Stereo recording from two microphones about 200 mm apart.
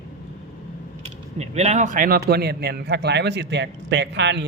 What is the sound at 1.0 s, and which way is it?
Speech, 35° right (ahead or behind).